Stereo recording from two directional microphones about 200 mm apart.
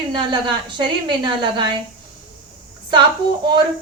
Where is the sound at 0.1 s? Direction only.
25° right (ahead or behind).